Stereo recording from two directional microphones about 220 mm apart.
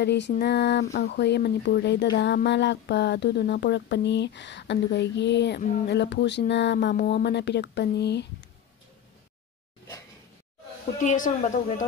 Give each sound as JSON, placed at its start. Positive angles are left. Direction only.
{"t": 0.0, "sound": "speech", "side_deg": 50}
{"t": 11.0, "sound": "a woman's voice", "side_deg": 35}